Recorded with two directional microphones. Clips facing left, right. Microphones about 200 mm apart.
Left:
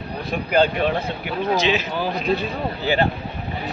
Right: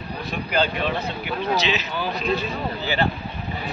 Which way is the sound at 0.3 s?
50° left (ahead or behind).